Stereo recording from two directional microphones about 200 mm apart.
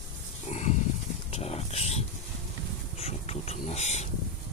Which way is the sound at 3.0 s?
30° left (ahead or behind).